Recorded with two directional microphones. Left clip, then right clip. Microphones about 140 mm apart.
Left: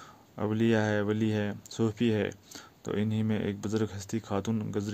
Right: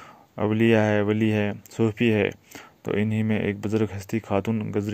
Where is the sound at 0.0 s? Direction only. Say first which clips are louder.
Right 7 dB; 25° right (ahead or behind).